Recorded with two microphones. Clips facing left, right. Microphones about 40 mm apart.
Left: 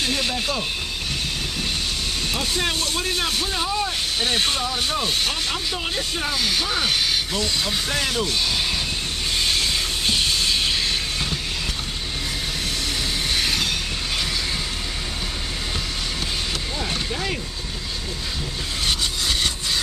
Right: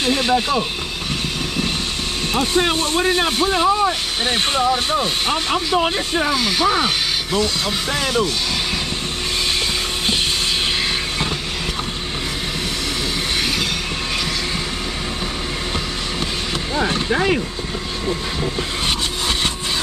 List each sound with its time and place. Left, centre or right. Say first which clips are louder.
0.0 s speech: right 6 dB; right
2.3 s speech: right 8 dB; right
6.3 s speech: right 5 dB; centre
7.9 s speech: right 7 dB; centre
18.9 s a sound: even; right